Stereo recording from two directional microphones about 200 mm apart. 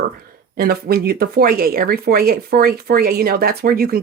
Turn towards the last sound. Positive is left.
turn(degrees=-50)  # may be behind; listen again after turning